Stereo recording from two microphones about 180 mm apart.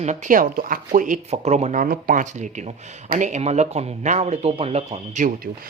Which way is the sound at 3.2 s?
40° right (ahead or behind).